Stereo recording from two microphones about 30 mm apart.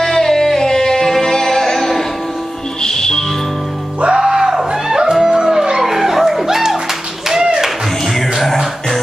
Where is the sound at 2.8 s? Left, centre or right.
Left.